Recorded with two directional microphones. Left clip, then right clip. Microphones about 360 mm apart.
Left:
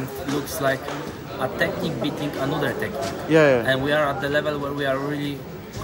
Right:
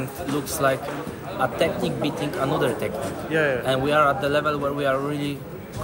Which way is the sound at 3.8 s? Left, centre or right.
Centre.